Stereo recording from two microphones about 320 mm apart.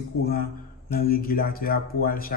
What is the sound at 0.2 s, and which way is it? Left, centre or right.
A man's voice, left.